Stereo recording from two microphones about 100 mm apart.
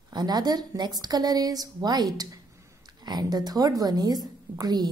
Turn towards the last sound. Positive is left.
turn(degrees=-40)  # may be behind; listen again after turning